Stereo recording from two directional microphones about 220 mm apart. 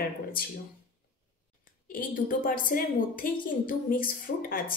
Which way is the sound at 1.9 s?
40° left (ahead or behind).